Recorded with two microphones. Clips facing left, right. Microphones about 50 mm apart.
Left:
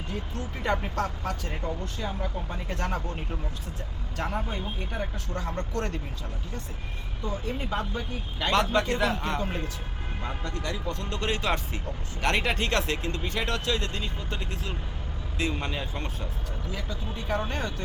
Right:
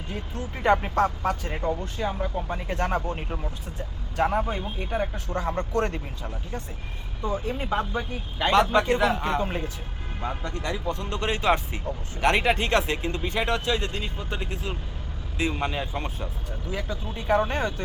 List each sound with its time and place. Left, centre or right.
0.6 s speech: right
7.3 s speech: centre
16.7 s speech: right